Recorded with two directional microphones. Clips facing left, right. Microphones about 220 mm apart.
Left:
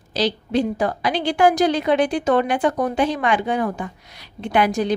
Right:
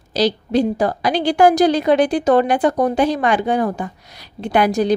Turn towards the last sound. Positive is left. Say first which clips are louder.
# right 3 dB
turn(degrees=-40)  # may be behind; listen again after turning